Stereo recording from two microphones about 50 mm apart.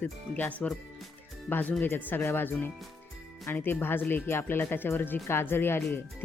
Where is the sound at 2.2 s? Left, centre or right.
Left.